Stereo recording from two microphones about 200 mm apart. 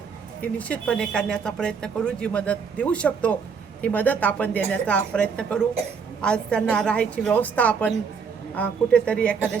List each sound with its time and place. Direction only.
0.4 s a woman's voice: 5° left (ahead or behind)